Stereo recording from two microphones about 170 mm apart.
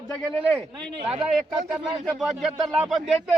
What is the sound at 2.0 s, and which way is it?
Speech, centre (ahead or behind).